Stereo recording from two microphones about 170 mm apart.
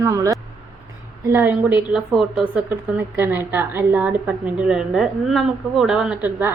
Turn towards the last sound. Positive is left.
turn(degrees=-10)  # may be behind; listen again after turning